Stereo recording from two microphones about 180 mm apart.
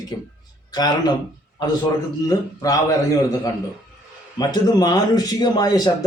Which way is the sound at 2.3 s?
20° left (ahead or behind).